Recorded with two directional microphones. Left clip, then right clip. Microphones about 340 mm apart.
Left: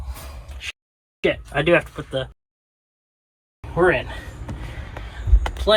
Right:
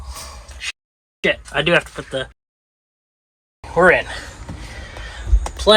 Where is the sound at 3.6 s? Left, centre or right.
Centre.